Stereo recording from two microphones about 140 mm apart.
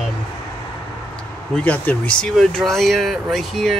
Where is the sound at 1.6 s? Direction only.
10° left (ahead or behind).